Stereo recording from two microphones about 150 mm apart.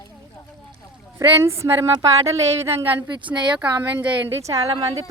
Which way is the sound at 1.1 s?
20° right (ahead or behind).